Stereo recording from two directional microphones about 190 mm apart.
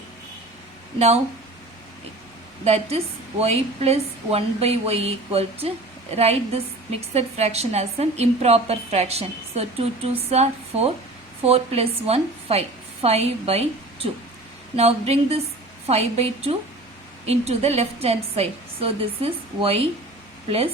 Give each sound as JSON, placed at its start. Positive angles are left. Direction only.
{"t": 0.9, "sound": "a woman's voice", "side_deg": -35}
{"t": 2.6, "sound": "a woman's voice", "side_deg": -35}